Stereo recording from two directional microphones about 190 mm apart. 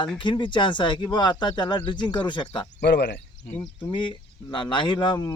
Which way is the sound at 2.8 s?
60° left (ahead or behind).